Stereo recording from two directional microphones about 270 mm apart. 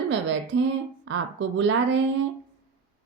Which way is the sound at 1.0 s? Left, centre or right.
Right.